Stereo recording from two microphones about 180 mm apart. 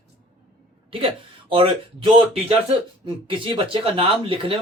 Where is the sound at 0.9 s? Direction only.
30° right (ahead or behind).